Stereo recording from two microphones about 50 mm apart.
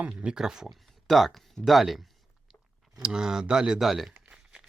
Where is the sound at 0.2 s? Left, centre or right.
Centre.